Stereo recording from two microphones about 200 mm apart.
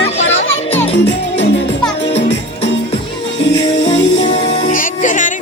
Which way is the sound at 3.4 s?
65° left (ahead or behind).